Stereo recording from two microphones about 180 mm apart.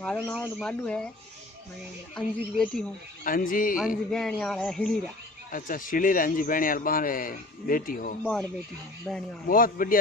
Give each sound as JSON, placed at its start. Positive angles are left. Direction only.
{"t": 0.0, "sound": "speech", "side_deg": 5}
{"t": 2.5, "sound": "speech", "side_deg": 5}
{"t": 3.3, "sound": "speech", "side_deg": 50}
{"t": 4.1, "sound": "speech", "side_deg": 5}
{"t": 5.5, "sound": "speech", "side_deg": 50}
{"t": 8.2, "sound": "speech", "side_deg": 5}
{"t": 9.5, "sound": "speech", "side_deg": 50}